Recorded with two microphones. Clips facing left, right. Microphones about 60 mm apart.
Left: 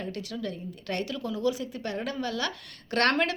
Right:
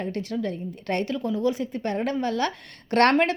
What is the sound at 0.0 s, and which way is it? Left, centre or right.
A woman's voice, right.